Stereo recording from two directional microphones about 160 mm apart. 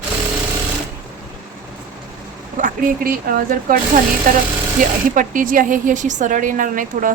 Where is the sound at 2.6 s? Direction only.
60° right (ahead or behind).